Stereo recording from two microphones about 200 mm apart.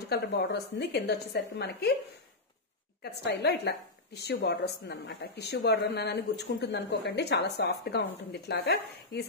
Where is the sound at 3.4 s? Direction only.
60° left (ahead or behind).